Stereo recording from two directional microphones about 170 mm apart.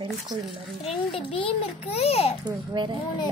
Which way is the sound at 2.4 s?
25° right (ahead or behind).